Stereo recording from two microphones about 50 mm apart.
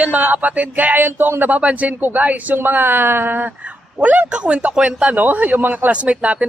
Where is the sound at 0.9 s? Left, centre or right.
Right.